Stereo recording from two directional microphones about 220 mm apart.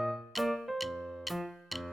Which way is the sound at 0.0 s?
Centre (ahead or behind).